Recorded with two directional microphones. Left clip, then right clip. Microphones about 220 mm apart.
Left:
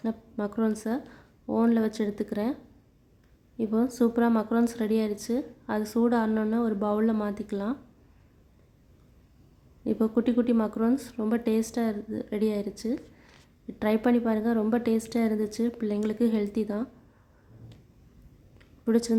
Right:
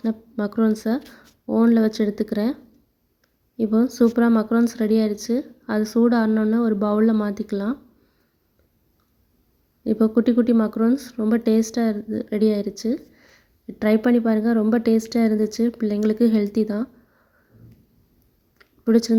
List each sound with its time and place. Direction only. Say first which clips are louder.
0.0 s speech: right 6 dB; 15° right (ahead or behind)
3.6 s speech: right 7 dB; 20° right (ahead or behind)
9.8 s speech: right 7 dB; 15° right (ahead or behind)
18.6 s a sound: right 7 dB; 15° right (ahead or behind)